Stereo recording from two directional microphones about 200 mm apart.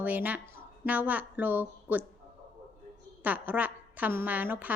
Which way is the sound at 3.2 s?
10° right (ahead or behind).